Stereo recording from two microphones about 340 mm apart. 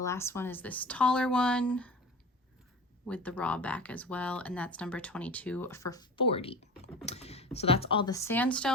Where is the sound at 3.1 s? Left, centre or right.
Centre.